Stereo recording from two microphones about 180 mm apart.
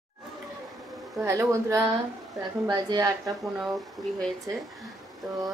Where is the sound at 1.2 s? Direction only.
15° right (ahead or behind).